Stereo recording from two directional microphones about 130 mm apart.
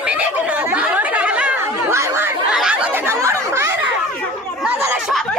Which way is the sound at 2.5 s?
5° right (ahead or behind).